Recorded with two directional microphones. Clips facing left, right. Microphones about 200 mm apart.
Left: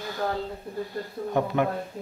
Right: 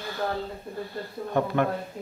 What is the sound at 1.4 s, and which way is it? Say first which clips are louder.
Speech: even; 15° left (ahead or behind).